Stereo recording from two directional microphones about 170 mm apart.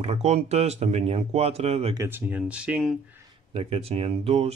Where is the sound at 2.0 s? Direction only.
10° right (ahead or behind).